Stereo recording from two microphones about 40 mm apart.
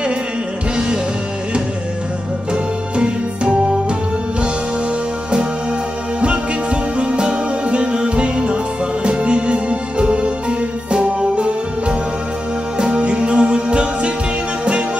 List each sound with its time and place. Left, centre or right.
2.5 s music: right
6.2 s music: right
12.7 s music: right